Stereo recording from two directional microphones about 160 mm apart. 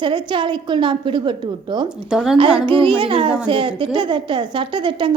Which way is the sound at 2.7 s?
30° right (ahead or behind).